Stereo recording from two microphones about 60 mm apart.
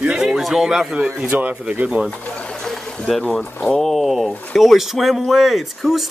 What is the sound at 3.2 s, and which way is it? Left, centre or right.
Speech, centre.